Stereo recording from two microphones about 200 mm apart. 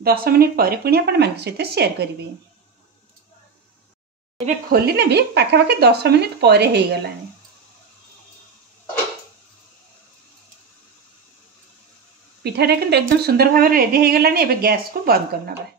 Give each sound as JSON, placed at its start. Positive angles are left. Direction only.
{"t": 0.0, "sound": "speech", "side_deg": -50}
{"t": 4.7, "sound": "speech", "side_deg": -55}
{"t": 12.4, "sound": "speech", "side_deg": -55}